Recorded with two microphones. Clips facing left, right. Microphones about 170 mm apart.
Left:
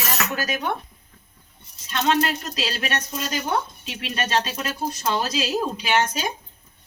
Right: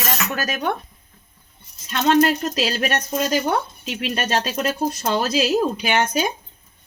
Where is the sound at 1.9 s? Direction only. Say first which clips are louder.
Right 5 dB; 50° right (ahead or behind).